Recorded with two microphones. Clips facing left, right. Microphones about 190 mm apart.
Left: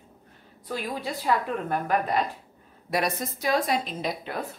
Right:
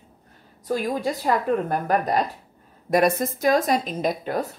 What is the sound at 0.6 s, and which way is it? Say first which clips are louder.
A woman's voice: right 7 dB; 45° right (ahead or behind).